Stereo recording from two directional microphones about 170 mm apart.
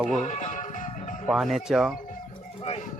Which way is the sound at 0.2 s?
45° left (ahead or behind).